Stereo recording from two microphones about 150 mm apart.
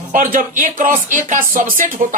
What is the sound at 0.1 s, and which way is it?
Speech, 60° right (ahead or behind).